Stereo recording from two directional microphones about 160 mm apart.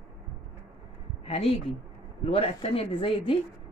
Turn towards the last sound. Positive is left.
turn(degrees=35)  # may be behind; listen again after turning